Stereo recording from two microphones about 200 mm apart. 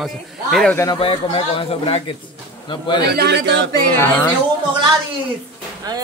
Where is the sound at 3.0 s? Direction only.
55° right (ahead or behind).